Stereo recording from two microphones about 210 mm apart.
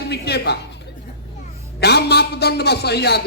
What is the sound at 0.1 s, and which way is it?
Speech, 50° left (ahead or behind).